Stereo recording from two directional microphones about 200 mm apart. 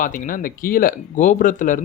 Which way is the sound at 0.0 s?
40° left (ahead or behind).